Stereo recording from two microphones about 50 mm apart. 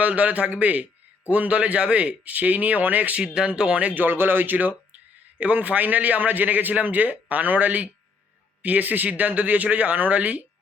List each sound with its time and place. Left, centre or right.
0.0 s a man's voice: right
3.3 s a man's voice: centre